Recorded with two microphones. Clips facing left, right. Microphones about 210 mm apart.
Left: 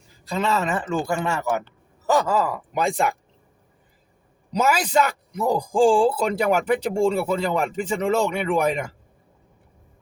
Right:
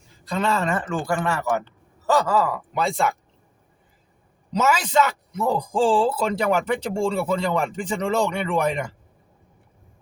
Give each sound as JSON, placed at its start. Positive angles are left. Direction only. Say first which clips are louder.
{"t": 0.3, "sound": "speech", "louder": "even", "side_deg": 5}
{"t": 1.0, "sound": "speech", "louder": "even", "side_deg": 20}
{"t": 5.3, "sound": "speech", "louder": "left 1 dB", "side_deg": 10}